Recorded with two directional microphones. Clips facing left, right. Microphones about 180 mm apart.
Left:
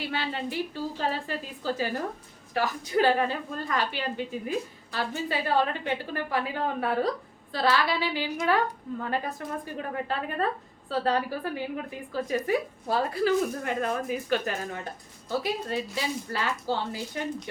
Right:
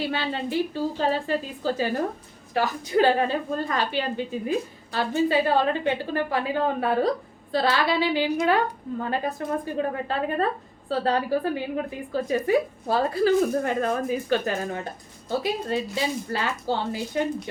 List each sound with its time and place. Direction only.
0.0 s a woman's voice: 30° right (ahead or behind)